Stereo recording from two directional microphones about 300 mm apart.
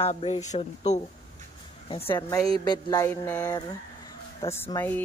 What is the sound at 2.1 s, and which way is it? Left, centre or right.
Speech, centre.